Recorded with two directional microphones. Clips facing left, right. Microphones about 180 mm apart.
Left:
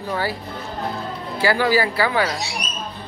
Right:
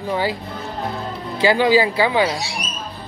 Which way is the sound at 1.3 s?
20° right (ahead or behind).